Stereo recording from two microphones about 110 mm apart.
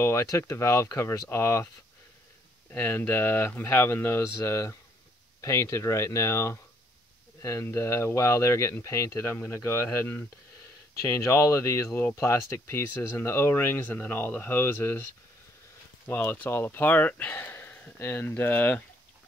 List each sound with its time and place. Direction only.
0.0 s speech: 25° left (ahead or behind)
2.7 s speech: 15° left (ahead or behind)
16.1 s speech: 20° left (ahead or behind)